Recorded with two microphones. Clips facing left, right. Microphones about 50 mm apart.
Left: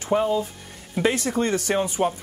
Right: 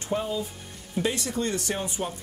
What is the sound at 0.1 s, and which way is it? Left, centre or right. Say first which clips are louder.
Speech: left 7 dB; left.